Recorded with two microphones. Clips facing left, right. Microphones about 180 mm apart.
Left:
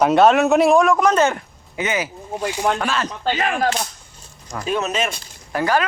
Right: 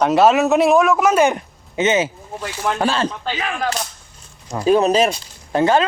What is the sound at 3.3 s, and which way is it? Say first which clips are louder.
Speech: left 3 dB; 45° left (ahead or behind).